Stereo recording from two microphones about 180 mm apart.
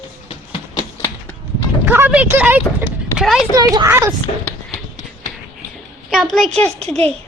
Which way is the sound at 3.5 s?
20° right (ahead or behind).